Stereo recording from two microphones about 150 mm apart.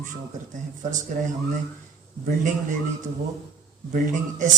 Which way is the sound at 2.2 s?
60° right (ahead or behind).